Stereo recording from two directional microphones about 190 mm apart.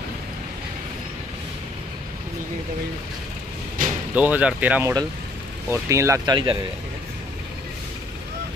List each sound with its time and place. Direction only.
4.1 s speech: 10° right (ahead or behind); by 6.6 s 25° right (ahead or behind)